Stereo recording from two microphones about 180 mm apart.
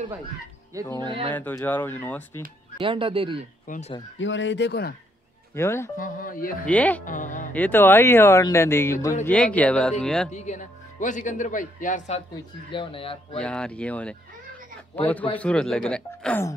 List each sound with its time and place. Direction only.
0.9 s speech: 25° right (ahead or behind)
1.3 s speech: 10° left (ahead or behind)
2.8 s speech: 30° right (ahead or behind)
3.6 s speech: 45° left (ahead or behind)
4.2 s speech: 90° left; by 4.9 s 70° left (ahead or behind)
5.5 s speech: 15° left (ahead or behind)
5.9 s speech: 50° left (ahead or behind)
6.6 s speech: 10° left (ahead or behind)
7.1 s speech: 45° left (ahead or behind)
7.5 s speech: 10° left (ahead or behind)
10.3 s speech: 40° left (ahead or behind)
12.7 s speech: 30° left (ahead or behind)
13.4 s speech: 5° left (ahead or behind)
15.3 s speech: 5° left (ahead or behind)